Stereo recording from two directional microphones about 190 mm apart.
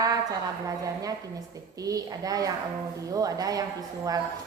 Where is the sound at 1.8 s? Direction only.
20° right (ahead or behind).